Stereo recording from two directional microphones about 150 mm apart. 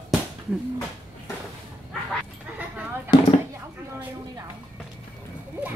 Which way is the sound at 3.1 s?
35° left (ahead or behind).